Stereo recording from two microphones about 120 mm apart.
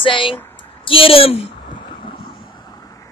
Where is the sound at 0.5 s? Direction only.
45° left (ahead or behind).